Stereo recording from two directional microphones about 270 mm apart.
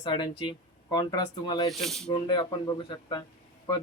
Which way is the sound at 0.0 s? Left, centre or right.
Centre.